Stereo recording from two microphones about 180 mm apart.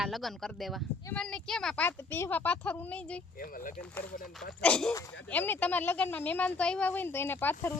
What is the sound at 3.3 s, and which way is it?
Speech, 50° left (ahead or behind).